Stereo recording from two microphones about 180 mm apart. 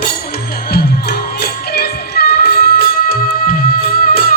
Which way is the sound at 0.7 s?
60° left (ahead or behind).